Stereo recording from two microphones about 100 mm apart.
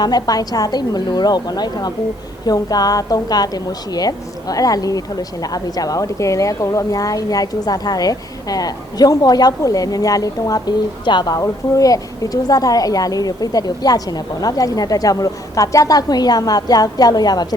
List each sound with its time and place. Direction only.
0.0 s a woman's voice: 40° left (ahead or behind)